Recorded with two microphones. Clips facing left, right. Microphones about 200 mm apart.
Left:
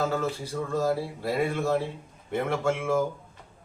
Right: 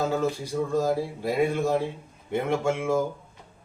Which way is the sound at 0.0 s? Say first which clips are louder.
Right 2 dB; 15° right (ahead or behind).